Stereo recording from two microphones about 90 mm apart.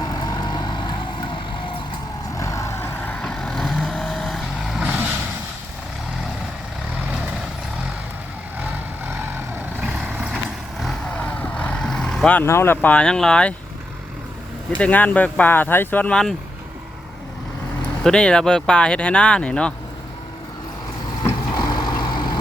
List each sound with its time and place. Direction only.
0.0 s vehicle: 50° left (ahead or behind)
2.4 s vehicle: 35° left (ahead or behind)
3.2 s vehicle: 5° left (ahead or behind)
4.8 s vehicle: 15° right (ahead or behind)
10.1 s vehicle: 10° right (ahead or behind)
11.2 s vehicle: 15° left (ahead or behind)
12.5 s speech: 25° left (ahead or behind); by 13.5 s 10° left (ahead or behind)
14.8 s speech: 15° left (ahead or behind)
18.0 s speech: 10° left (ahead or behind)
21.5 s vehicle: 50° left (ahead or behind)